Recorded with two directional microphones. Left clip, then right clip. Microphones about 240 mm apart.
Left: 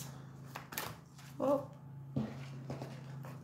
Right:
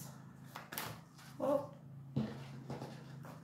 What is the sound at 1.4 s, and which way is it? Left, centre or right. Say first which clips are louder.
Dog: left 3 dB; left.